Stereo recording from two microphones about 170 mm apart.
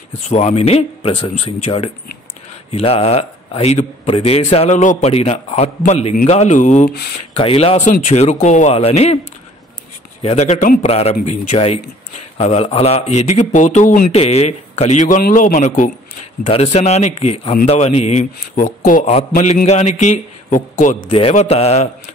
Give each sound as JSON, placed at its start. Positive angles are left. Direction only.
{"t": 0.3, "sound": "a man's voice", "side_deg": 40}
{"t": 7.3, "sound": "speech", "side_deg": 35}
{"t": 10.2, "sound": "speech", "side_deg": 40}
{"t": 16.4, "sound": "speech", "side_deg": 35}
{"t": 18.8, "sound": "a man's voice", "side_deg": 50}
{"t": 21.1, "sound": "speech", "side_deg": 35}